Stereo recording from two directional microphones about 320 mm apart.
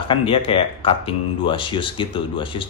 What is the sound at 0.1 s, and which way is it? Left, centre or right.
Speech, centre.